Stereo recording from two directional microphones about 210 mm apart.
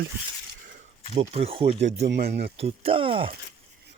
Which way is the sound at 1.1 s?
30° right (ahead or behind).